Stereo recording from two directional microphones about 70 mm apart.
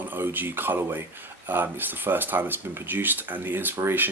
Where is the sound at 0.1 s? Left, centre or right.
Right.